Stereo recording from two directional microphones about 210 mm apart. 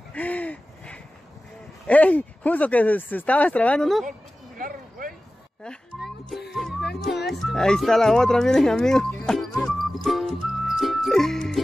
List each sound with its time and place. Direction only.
0.1 s hoot: 5° left (ahead or behind)
1.9 s speech: 5° left (ahead or behind)
4.6 s a sound: 40° right (ahead or behind)
5.6 s music: centre (ahead or behind)